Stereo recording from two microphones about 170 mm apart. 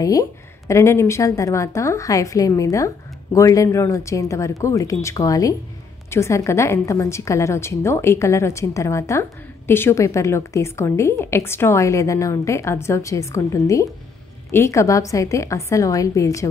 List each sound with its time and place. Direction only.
0.0 s a woman's voice: 20° left (ahead or behind)